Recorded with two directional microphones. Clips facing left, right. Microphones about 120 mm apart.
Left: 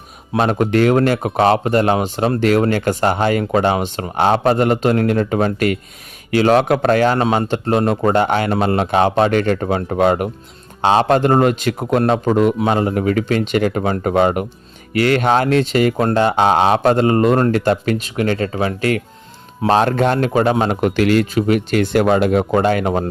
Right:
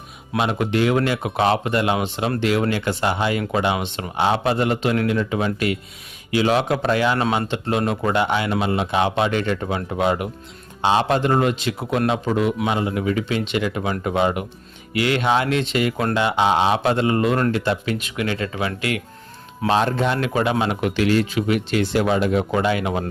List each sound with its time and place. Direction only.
0.3 s a man's voice: 45° left (ahead or behind)
7.2 s a man's voice: 30° left (ahead or behind)
19.7 s speech: 55° left (ahead or behind)
20.2 s a man's voice: 40° left (ahead or behind); by 21.2 s 60° left (ahead or behind)
21.3 s a man's voice: 45° left (ahead or behind)